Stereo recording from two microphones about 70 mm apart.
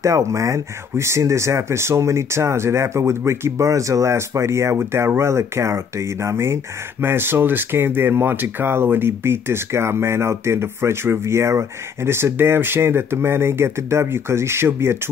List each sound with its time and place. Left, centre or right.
0.0 s speech: right